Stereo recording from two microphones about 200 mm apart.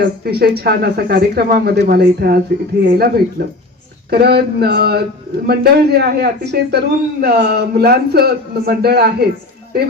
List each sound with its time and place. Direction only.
0.0 s a man's voice: 50° right (ahead or behind)